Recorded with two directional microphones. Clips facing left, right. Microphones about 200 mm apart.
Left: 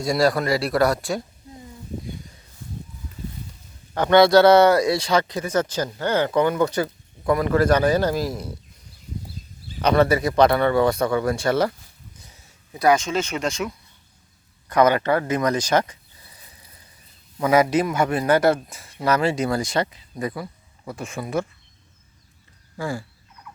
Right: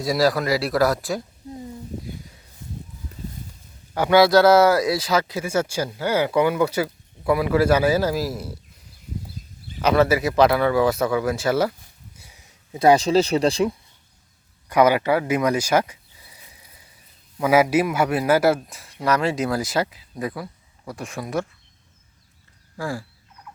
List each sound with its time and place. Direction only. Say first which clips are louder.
0.0 s a man's voice: even; centre (ahead or behind)
3.9 s speech: left 1 dB; 5° right (ahead or behind)
9.8 s a man's voice: even; 5° right (ahead or behind)
12.1 s a sound: left 1 dB; 10° right (ahead or behind)
12.7 s speech: right 4 dB; 30° right (ahead or behind)
14.7 s a man's voice: right 1 dB; 10° right (ahead or behind)
22.8 s a man's voice: even; centre (ahead or behind)